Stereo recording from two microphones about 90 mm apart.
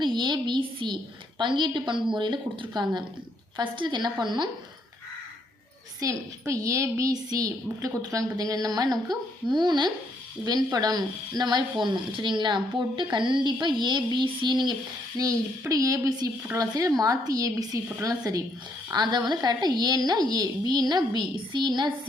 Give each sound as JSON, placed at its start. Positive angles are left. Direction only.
{"t": 0.0, "sound": "a child's voice", "side_deg": -55}
{"t": 6.0, "sound": "a woman's voice", "side_deg": -35}
{"t": 15.7, "sound": "a woman's voice", "side_deg": -40}
{"t": 18.9, "sound": "a woman's voice", "side_deg": -55}